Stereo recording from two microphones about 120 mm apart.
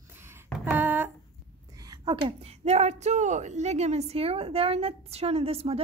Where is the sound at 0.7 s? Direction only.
15° right (ahead or behind).